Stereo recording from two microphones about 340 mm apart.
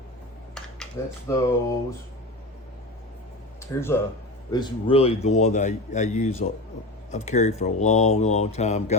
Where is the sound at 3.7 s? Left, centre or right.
Centre.